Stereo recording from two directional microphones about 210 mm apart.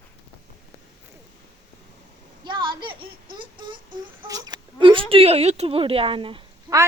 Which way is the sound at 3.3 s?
20° right (ahead or behind).